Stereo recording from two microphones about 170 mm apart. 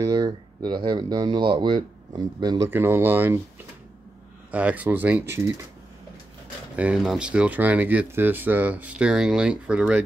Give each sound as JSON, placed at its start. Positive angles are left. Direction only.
{"t": 0.0, "sound": "speech", "side_deg": -20}
{"t": 2.7, "sound": "speech", "side_deg": -15}
{"t": 4.5, "sound": "speech", "side_deg": -10}
{"t": 6.8, "sound": "speech", "side_deg": -5}